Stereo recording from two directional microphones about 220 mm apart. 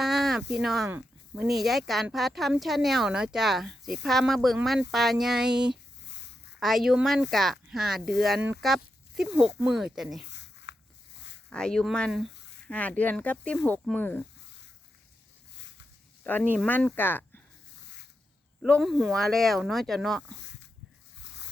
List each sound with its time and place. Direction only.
0.0 s a sound: centre (ahead or behind)
1.5 s speech: centre (ahead or behind)
10.3 s a sound: 50° left (ahead or behind)
11.5 s speech: 5° left (ahead or behind)
16.2 s speech: 5° left (ahead or behind)
18.6 s speech: centre (ahead or behind)